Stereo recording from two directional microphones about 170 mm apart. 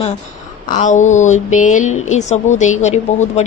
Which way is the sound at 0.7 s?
45° left (ahead or behind).